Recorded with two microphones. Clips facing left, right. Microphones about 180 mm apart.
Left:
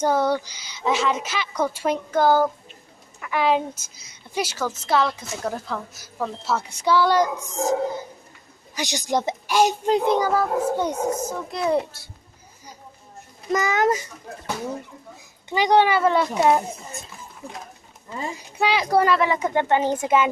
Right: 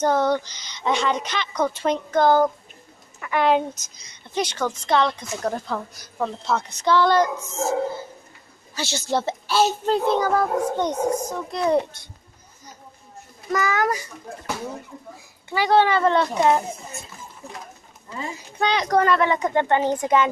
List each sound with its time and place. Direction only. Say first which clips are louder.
0.0 s a woman's voice: right 1 dB; 10° left (ahead or behind)
13.5 s a child's voice: left 2 dB; 20° left (ahead or behind)
15.5 s a woman's voice: even; 15° left (ahead or behind)
18.6 s a woman's voice: even; 5° left (ahead or behind)